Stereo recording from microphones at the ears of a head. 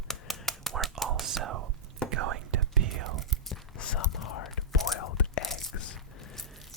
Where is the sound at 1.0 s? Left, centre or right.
Right.